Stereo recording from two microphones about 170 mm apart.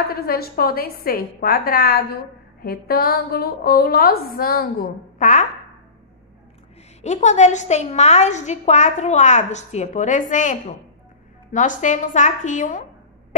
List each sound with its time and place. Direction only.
0.1 s a woman's voice: 60° left (ahead or behind); by 5.5 s 45° left (ahead or behind)
7.0 s a woman's voice: 40° left (ahead or behind)